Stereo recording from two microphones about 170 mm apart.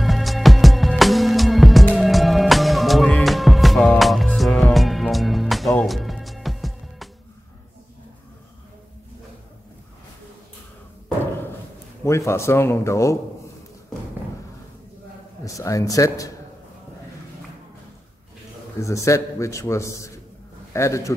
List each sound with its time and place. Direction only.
0.0 s music: centre (ahead or behind)
12.0 s a man's voice: 15° left (ahead or behind)
15.4 s a man's voice: 20° left (ahead or behind)
18.8 s a man's voice: 20° left (ahead or behind)